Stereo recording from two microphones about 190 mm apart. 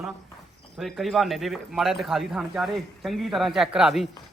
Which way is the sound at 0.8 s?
Centre (ahead or behind).